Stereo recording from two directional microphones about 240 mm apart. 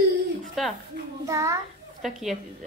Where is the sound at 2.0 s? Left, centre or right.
Centre.